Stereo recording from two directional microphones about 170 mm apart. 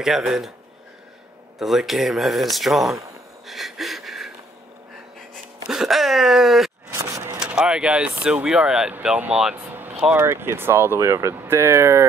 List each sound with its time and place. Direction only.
0.0 s speech: centre (ahead or behind)
1.6 s speech: centre (ahead or behind)
3.4 s a sound: centre (ahead or behind)
5.7 s groan: centre (ahead or behind)
6.9 s vehicle: 20° right (ahead or behind)
7.3 s speech: 5° right (ahead or behind)